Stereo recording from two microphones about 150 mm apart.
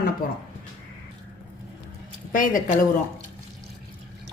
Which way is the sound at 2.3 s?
60° left (ahead or behind).